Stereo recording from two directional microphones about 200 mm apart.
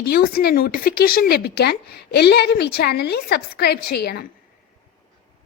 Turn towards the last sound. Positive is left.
turn(degrees=55)  # may be behind; listen again after turning